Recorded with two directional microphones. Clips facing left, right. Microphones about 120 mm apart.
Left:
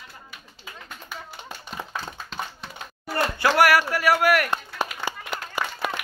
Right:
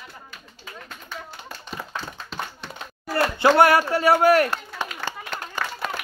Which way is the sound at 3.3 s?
25° right (ahead or behind).